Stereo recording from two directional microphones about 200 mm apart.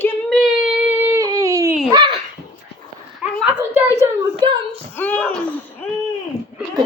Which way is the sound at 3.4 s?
5° right (ahead or behind).